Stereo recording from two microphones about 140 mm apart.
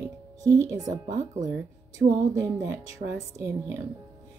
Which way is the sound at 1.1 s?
60° right (ahead or behind).